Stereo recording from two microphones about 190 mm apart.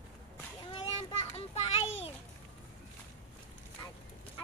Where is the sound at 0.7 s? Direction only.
30° left (ahead or behind).